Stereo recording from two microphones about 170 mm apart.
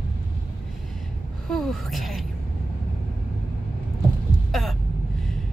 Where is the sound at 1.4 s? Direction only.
Centre (ahead or behind).